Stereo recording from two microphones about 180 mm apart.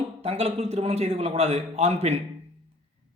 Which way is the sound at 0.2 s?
35° right (ahead or behind).